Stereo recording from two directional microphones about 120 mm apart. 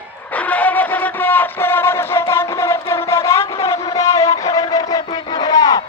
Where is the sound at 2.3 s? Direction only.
20° left (ahead or behind).